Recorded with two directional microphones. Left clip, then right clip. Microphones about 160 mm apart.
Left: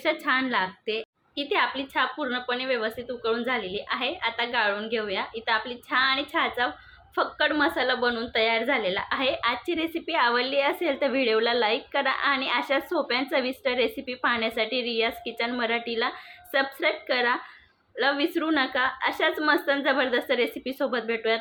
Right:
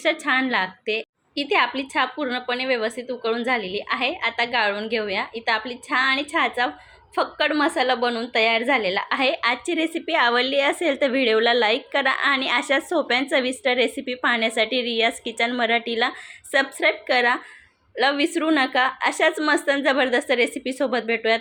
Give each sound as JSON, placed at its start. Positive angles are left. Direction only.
{"t": 0.0, "sound": "a woman's voice", "side_deg": -30}